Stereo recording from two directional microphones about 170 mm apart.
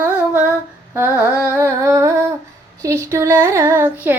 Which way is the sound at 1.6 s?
15° right (ahead or behind).